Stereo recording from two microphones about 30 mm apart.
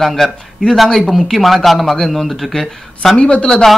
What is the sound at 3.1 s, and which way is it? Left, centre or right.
Speech, left.